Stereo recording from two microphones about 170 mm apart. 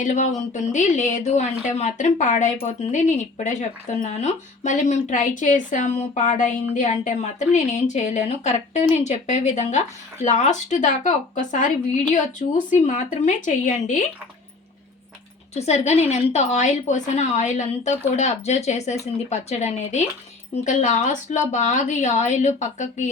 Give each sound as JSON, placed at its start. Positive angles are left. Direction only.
{"t": 0.0, "sound": "speech", "side_deg": 45}
{"t": 15.5, "sound": "speech", "side_deg": 40}